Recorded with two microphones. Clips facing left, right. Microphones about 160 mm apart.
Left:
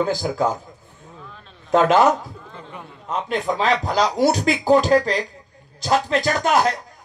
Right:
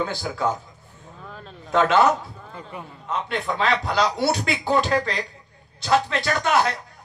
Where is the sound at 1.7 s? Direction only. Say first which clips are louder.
Left 3 dB; 40° left (ahead or behind).